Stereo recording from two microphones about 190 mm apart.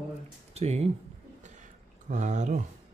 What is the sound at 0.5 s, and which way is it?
Speech, 35° right (ahead or behind).